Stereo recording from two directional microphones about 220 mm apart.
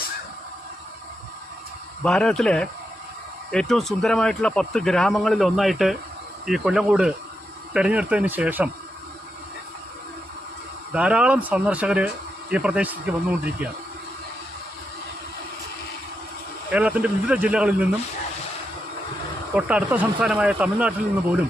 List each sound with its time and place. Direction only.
2.0 s speech: 5° left (ahead or behind)
10.9 s speech: 5° right (ahead or behind)
16.7 s speech: 5° right (ahead or behind)
19.5 s speech: 5° right (ahead or behind)